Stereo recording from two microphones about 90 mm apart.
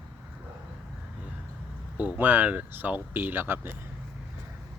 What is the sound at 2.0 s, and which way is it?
Speech, 20° right (ahead or behind).